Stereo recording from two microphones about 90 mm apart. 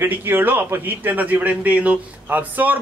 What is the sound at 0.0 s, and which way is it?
Speech, 25° right (ahead or behind).